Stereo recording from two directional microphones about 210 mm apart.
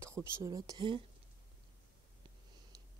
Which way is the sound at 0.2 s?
15° right (ahead or behind).